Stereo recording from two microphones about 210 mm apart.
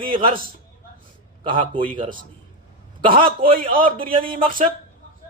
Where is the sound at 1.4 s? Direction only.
25° right (ahead or behind).